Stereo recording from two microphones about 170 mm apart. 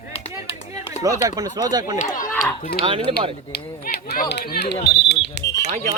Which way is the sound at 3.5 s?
70° left (ahead or behind).